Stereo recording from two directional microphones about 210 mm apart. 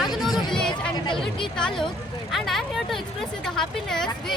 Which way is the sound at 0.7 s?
20° left (ahead or behind).